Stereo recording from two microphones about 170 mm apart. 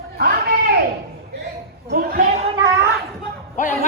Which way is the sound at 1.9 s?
60° right (ahead or behind).